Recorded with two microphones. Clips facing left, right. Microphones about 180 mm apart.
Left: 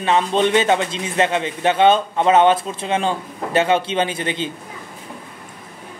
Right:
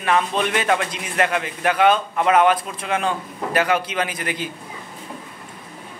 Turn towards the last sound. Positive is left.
turn(degrees=25)  # may be behind; listen again after turning